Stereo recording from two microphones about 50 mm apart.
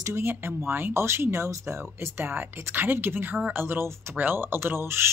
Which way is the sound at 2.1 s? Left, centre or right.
Right.